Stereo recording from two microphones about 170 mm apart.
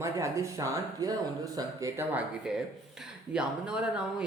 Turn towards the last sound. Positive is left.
turn(degrees=-5)  # may be behind; listen again after turning